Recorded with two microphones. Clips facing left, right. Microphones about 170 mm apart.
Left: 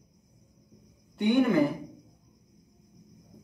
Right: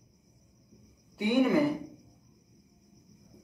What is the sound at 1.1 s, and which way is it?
Speech, 5° right (ahead or behind).